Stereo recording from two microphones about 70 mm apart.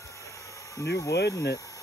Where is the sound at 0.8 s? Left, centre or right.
Left.